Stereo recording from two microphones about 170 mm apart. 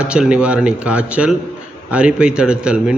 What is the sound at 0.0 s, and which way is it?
A man's voice, 5° right (ahead or behind).